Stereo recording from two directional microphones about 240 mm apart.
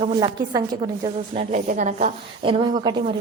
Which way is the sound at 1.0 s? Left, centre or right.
Right.